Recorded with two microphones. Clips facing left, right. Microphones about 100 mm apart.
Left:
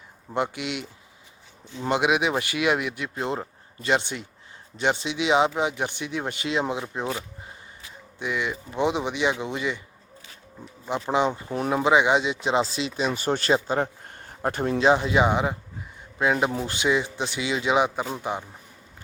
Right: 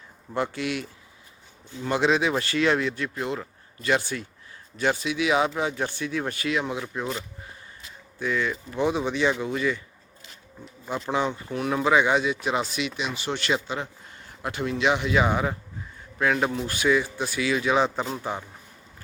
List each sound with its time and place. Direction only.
0.3 s a man's voice: 20° left (ahead or behind)
3.2 s a man's voice: 30° left (ahead or behind)
8.2 s a man's voice: 15° left (ahead or behind)
10.8 s a man's voice: 20° left (ahead or behind)
11.7 s speech: 20° left (ahead or behind)
15.1 s a man's voice: 20° left (ahead or behind)